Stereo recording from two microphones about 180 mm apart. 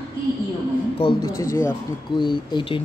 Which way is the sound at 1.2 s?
15° left (ahead or behind).